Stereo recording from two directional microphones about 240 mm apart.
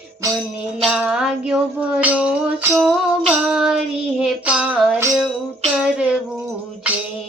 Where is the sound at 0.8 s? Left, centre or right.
Centre.